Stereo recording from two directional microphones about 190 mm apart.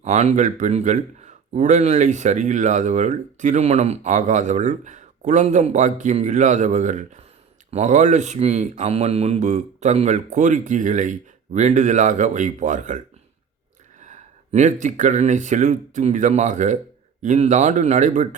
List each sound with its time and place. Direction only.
0.0 s a man's voice: 35° right (ahead or behind)
14.0 s a man's voice: 40° right (ahead or behind)